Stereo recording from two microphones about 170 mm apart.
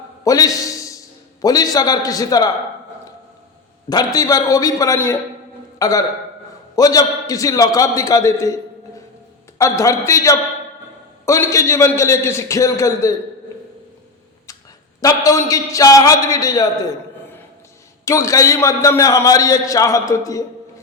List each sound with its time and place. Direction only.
0.3 s a man's voice: 20° left (ahead or behind)
3.8 s a man's voice: 20° left (ahead or behind)
9.6 s a man's voice: 15° left (ahead or behind)
15.0 s a man's voice: 20° left (ahead or behind)
18.0 s a man's voice: 20° left (ahead or behind)